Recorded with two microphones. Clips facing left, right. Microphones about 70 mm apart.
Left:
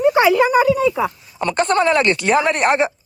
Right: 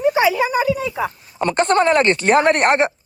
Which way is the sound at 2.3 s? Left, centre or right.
Right.